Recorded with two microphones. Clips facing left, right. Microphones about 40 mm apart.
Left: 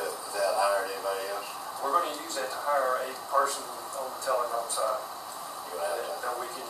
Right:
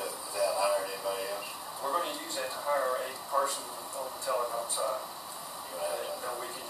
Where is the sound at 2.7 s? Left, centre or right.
Centre.